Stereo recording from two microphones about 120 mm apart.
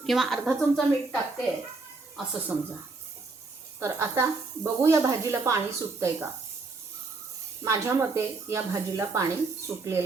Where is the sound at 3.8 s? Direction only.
20° right (ahead or behind).